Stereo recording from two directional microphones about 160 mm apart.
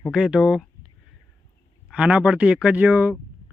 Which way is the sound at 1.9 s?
5° right (ahead or behind).